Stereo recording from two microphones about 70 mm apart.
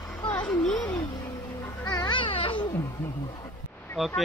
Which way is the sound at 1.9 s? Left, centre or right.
Left.